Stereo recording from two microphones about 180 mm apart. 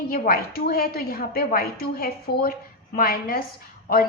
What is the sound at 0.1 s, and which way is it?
A woman's voice, 55° left (ahead or behind).